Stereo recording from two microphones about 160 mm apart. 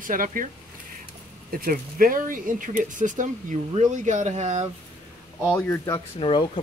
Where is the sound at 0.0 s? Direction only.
60° right (ahead or behind).